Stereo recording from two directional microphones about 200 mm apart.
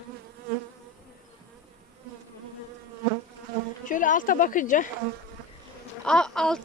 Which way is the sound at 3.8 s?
40° left (ahead or behind).